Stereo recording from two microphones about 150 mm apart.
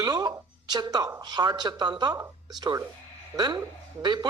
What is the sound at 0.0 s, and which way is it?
A man's voice, 25° right (ahead or behind).